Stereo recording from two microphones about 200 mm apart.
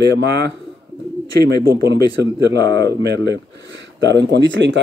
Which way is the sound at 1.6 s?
55° right (ahead or behind).